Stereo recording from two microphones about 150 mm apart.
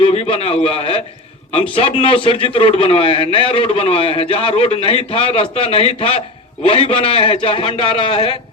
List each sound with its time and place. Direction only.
0.0 s a man's voice: 40° left (ahead or behind)